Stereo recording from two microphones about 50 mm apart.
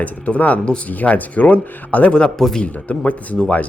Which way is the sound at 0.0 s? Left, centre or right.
Left.